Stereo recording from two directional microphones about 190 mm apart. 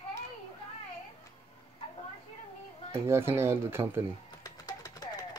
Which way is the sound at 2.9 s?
15° right (ahead or behind).